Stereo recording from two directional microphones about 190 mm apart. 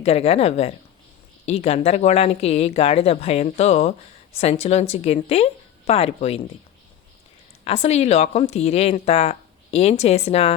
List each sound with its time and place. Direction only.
0.0 s speech: 30° left (ahead or behind)
7.6 s speech: 30° left (ahead or behind)